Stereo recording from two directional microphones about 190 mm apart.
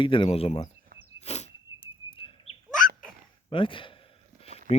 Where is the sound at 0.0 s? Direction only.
25° left (ahead or behind).